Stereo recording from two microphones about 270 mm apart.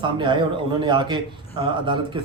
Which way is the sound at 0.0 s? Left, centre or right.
Centre.